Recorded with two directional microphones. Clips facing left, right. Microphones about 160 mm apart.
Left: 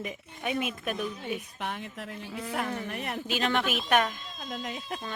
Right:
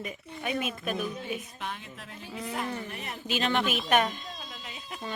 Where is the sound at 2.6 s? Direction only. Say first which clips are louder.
Left 4 dB; 55° left (ahead or behind).